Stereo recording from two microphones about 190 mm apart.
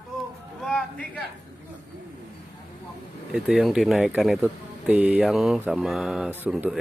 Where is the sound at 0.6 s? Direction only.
5° left (ahead or behind).